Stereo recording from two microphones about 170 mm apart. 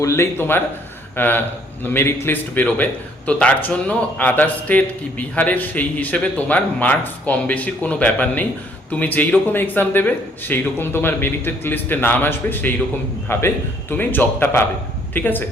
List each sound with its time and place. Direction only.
0.0 s speech: 15° left (ahead or behind)